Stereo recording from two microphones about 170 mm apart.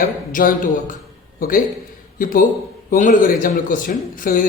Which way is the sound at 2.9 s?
50° left (ahead or behind).